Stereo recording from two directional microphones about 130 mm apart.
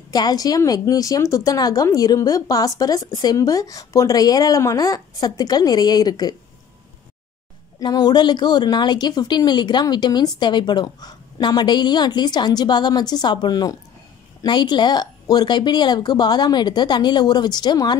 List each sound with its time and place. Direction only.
0.1 s speech: 30° left (ahead or behind)
7.8 s a woman's voice: 30° left (ahead or behind)